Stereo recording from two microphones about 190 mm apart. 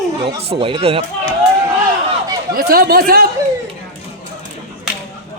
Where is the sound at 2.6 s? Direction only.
50° right (ahead or behind).